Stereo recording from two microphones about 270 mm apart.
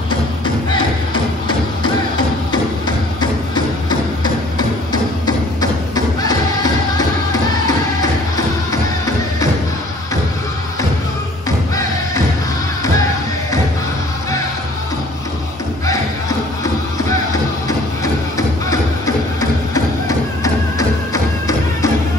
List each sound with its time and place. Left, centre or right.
0.7 s music: centre
5.2 s music: centre
19.7 s music: centre